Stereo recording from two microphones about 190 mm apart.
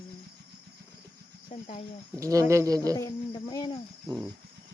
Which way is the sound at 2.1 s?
15° right (ahead or behind).